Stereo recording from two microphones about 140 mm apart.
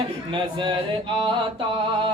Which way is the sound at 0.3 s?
35° right (ahead or behind).